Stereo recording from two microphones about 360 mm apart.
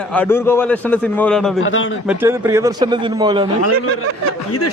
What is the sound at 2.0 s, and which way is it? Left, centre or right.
A man's voice, centre.